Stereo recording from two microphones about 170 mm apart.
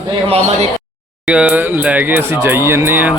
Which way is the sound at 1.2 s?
5° right (ahead or behind).